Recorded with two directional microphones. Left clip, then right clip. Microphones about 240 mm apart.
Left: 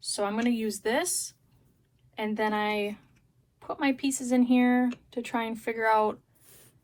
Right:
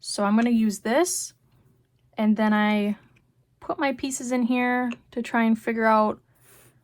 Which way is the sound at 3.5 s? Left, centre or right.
Right.